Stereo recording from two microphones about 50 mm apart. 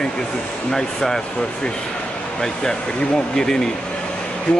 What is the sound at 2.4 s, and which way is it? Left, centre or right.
Speech, centre.